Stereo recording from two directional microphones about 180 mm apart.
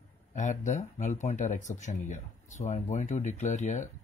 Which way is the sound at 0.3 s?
45° left (ahead or behind).